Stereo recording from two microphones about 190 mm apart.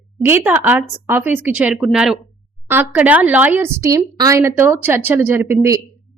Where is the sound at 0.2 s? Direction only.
10° right (ahead or behind).